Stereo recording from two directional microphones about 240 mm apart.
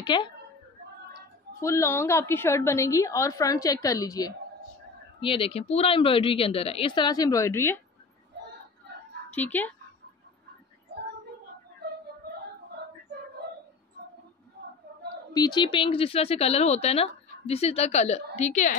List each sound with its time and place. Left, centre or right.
0.0 s a woman's voice: centre
9.3 s a woman's voice: centre
15.3 s speech: centre